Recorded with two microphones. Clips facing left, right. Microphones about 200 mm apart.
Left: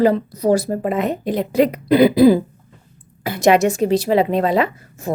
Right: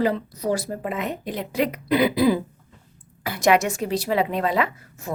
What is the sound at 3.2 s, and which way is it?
A woman's voice, 25° left (ahead or behind).